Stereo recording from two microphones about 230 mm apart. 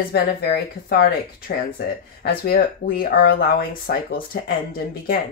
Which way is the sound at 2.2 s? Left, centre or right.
Left.